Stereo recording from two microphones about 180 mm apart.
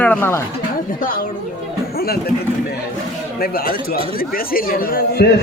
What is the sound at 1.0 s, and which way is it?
Speech, 55° left (ahead or behind).